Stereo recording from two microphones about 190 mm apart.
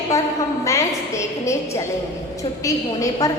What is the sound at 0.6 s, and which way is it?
A woman's voice, 15° left (ahead or behind).